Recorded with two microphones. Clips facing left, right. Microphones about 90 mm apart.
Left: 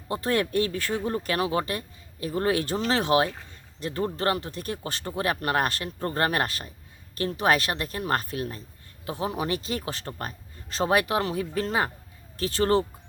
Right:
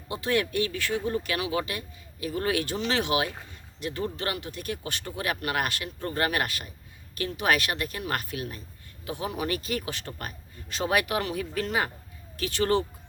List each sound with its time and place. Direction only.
0.1 s speech: 40° left (ahead or behind)